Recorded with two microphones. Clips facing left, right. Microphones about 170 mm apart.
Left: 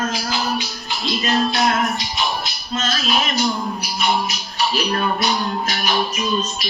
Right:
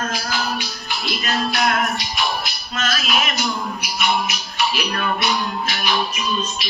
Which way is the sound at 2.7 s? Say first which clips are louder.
Left 2 dB; 30° left (ahead or behind).